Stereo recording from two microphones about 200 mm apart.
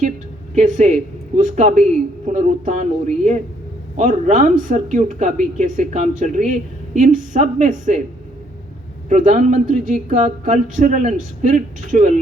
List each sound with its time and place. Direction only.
0.5 s speech: 40° right (ahead or behind)
3.9 s speech: 40° right (ahead or behind)
9.0 s speech: 35° right (ahead or behind)